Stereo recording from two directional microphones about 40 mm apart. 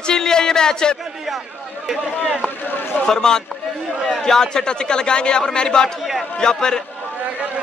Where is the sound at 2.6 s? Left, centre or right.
Left.